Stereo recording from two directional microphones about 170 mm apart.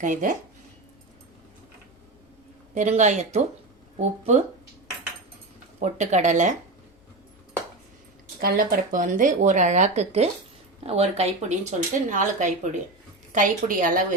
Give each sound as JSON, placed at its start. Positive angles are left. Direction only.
{"t": 0.0, "sound": "speech", "side_deg": -50}
{"t": 2.7, "sound": "speech", "side_deg": -45}
{"t": 5.8, "sound": "speech", "side_deg": -45}
{"t": 8.4, "sound": "speech", "side_deg": -60}